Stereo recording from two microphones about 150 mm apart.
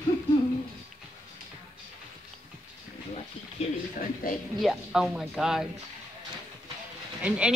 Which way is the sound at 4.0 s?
70° left (ahead or behind).